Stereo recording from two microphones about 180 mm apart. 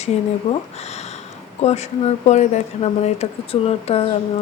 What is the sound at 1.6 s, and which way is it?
Speech, 35° left (ahead or behind).